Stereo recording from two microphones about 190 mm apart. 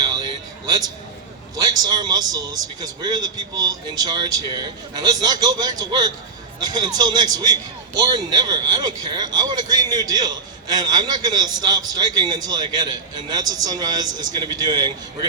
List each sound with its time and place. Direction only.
1.6 s speech: 20° right (ahead or behind)